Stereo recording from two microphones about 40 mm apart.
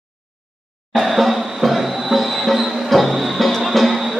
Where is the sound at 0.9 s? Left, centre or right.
Centre.